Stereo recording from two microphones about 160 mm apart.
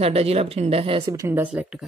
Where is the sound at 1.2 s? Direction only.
15° right (ahead or behind).